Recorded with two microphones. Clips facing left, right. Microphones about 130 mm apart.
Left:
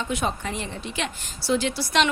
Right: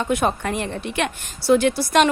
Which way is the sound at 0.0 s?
55° right (ahead or behind).